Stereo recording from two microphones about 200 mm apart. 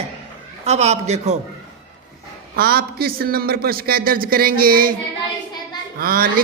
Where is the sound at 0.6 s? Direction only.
35° right (ahead or behind).